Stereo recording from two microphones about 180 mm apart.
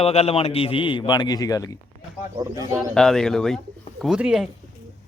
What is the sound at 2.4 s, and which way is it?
Speech, 20° right (ahead or behind).